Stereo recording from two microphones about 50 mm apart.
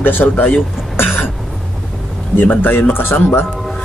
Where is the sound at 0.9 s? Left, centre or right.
Left.